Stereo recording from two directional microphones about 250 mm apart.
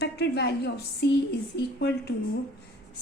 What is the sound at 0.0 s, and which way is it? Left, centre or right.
A woman's voice, left.